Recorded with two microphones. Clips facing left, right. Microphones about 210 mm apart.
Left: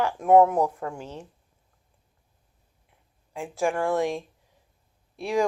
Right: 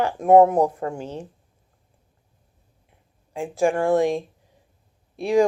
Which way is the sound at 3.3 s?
35° right (ahead or behind).